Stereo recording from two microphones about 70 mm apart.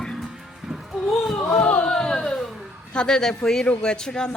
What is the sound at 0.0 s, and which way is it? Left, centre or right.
Music, centre.